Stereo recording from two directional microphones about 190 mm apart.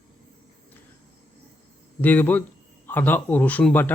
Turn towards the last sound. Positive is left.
turn(degrees=10)  # may be behind; listen again after turning